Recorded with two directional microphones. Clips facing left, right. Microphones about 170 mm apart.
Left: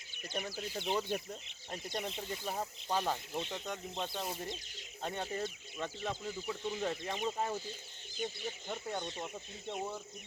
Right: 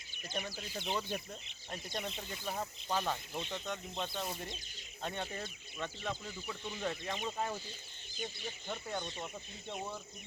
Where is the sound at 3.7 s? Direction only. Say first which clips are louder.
Even; 30° left (ahead or behind).